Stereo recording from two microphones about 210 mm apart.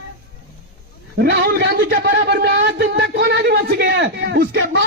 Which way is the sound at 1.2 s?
50° right (ahead or behind).